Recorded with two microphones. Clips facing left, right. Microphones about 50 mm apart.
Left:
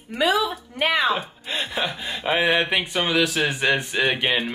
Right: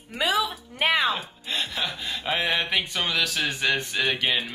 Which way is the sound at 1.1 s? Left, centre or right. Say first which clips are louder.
Left 4 dB; centre.